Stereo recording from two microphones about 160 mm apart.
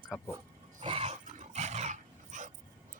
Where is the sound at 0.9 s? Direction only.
40° right (ahead or behind).